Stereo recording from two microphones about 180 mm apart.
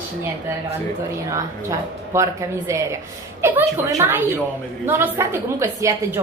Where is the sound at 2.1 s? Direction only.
15° right (ahead or behind).